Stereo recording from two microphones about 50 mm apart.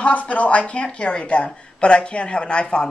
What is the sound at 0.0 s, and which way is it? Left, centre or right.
A woman's voice, left.